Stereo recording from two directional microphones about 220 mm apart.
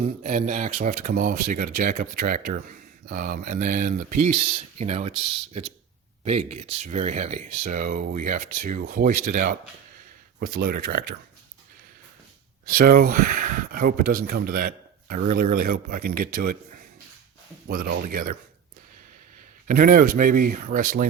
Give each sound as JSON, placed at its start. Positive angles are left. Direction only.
{"t": 0.2, "sound": "speech", "side_deg": -35}
{"t": 6.2, "sound": "speech", "side_deg": -30}
{"t": 12.6, "sound": "speech", "side_deg": -40}
{"t": 17.7, "sound": "speech", "side_deg": -45}
{"t": 19.6, "sound": "speech", "side_deg": -40}